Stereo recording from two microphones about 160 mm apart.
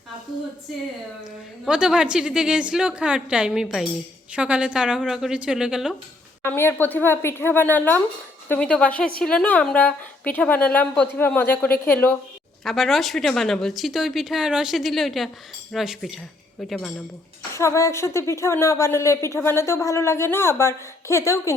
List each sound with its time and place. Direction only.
1.6 s speech: 5° right (ahead or behind)
6.4 s a woman's voice: 15° left (ahead or behind)
17.5 s a woman's voice: 20° left (ahead or behind)